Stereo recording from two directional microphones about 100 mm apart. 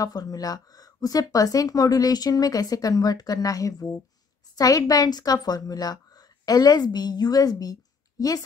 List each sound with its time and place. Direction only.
0.0 s a woman's voice: 40° left (ahead or behind)